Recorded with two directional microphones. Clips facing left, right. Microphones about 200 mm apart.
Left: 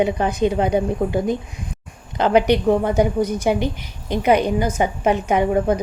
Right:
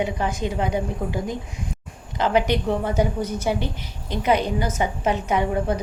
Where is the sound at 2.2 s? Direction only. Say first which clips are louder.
Left 5 dB; 15° left (ahead or behind).